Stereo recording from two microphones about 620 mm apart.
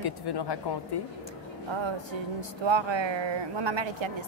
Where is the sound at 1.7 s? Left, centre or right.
Right.